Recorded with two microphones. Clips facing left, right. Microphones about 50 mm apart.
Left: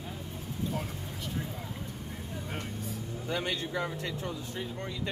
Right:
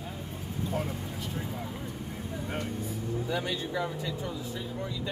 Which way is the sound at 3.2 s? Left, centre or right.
Left.